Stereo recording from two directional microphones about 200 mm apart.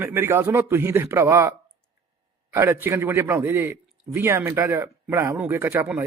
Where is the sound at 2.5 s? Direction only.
10° right (ahead or behind).